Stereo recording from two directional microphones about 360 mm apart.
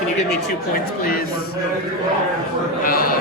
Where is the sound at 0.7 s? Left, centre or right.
Left.